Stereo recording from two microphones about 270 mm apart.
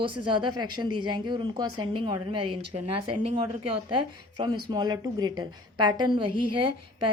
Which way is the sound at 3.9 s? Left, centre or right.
Centre.